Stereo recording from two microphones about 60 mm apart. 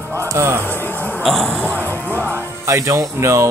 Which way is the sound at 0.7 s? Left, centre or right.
Left.